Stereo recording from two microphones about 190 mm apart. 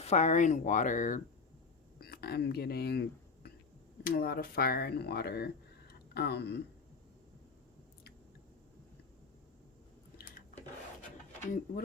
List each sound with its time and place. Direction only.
0.0 s speech: 35° left (ahead or behind)
2.0 s whispering: 55° left (ahead or behind)
4.0 s speech: 50° left (ahead or behind)
5.9 s a sound: 60° left (ahead or behind)